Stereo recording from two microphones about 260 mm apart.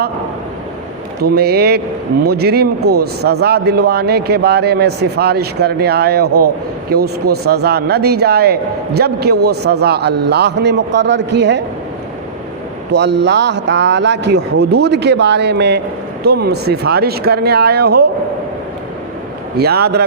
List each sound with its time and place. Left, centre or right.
1.2 s a man's voice: right
12.9 s a man's voice: right
19.5 s a man's voice: right